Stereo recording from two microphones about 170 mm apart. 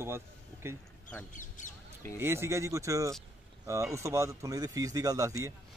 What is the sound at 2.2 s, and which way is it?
Speech, 15° right (ahead or behind).